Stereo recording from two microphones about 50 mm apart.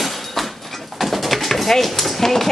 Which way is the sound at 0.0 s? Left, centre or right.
Centre.